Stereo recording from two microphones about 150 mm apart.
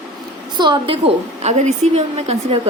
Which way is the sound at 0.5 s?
35° right (ahead or behind).